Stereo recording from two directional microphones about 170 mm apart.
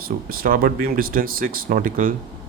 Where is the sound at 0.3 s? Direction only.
60° right (ahead or behind).